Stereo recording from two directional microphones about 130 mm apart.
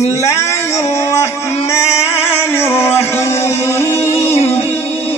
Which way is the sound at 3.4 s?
55° left (ahead or behind).